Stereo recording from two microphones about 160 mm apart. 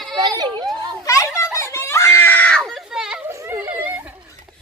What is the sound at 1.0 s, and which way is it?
Screaming, 20° left (ahead or behind).